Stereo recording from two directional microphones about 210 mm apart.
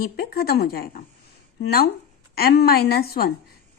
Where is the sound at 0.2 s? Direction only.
45° left (ahead or behind).